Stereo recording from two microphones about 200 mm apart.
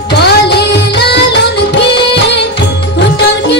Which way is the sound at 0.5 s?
55° left (ahead or behind).